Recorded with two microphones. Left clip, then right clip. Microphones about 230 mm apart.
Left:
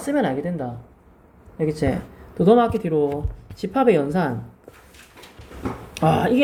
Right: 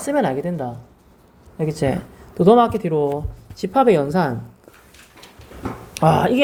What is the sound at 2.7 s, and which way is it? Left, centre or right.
Speech, right.